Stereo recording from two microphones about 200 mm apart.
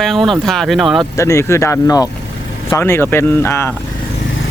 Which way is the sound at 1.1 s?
15° left (ahead or behind).